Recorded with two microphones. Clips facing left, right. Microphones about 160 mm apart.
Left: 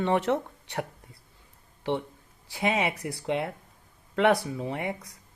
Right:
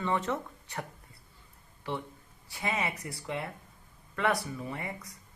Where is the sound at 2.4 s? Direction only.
90° left.